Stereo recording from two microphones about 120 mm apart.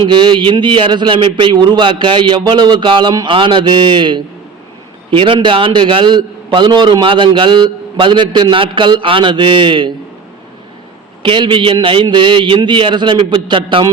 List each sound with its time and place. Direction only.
0.0 s a man's voice: 40° right (ahead or behind)
11.2 s a man's voice: 45° right (ahead or behind)